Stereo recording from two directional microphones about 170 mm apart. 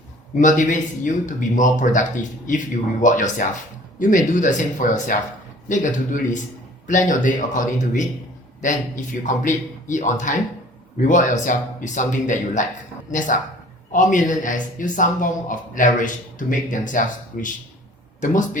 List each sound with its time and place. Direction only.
0.3 s a man's voice: 45° left (ahead or behind)